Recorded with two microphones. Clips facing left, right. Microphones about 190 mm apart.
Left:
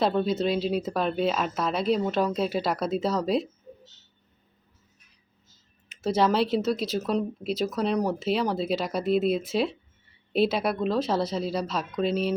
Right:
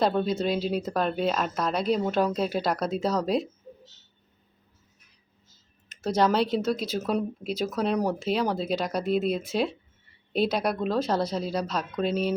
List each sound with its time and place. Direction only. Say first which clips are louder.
0.0 s speech: even; centre (ahead or behind)
5.9 s speech: even; 5° left (ahead or behind)